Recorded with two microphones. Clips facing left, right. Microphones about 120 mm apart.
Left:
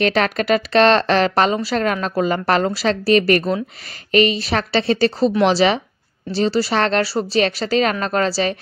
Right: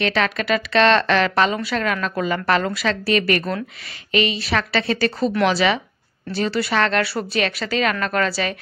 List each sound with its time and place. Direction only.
0.0 s speech: 40° left (ahead or behind)